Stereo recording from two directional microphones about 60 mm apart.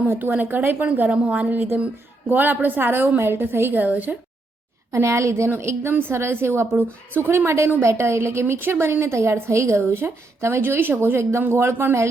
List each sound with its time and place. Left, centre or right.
0.1 s a woman's voice: right
4.9 s a woman's voice: right
5.9 s a woman's voice: right